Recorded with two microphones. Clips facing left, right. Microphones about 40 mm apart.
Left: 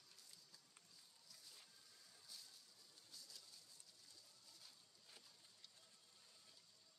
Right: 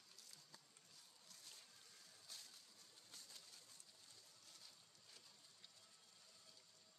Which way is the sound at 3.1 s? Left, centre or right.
Right.